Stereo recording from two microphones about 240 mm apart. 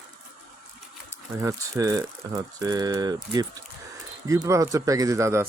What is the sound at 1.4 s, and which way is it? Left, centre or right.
Speech, centre.